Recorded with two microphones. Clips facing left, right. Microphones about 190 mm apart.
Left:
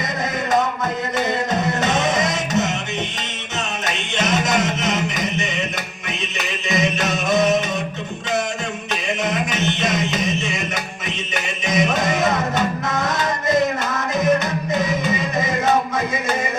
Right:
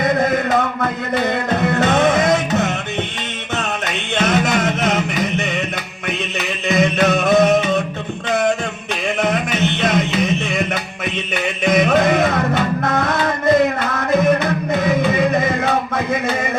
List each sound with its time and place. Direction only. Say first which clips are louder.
0.0 s music: right 8 dB; 55° right (ahead or behind)
4.1 s music: right 3 dB; 55° right (ahead or behind)
6.7 s music: right 6 dB; 55° right (ahead or behind)
9.2 s music: right 4 dB; 55° right (ahead or behind)
11.6 s music: right 6 dB; 55° right (ahead or behind)